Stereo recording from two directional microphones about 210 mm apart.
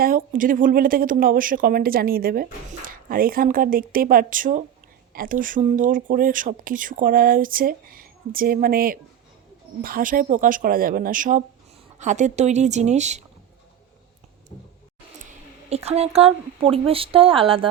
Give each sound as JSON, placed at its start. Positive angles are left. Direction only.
{"t": 0.0, "sound": "a woman's voice", "side_deg": -40}
{"t": 15.7, "sound": "speech", "side_deg": -30}